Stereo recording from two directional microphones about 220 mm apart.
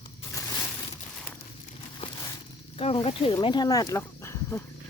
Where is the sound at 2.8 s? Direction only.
25° left (ahead or behind); by 4.6 s 10° left (ahead or behind).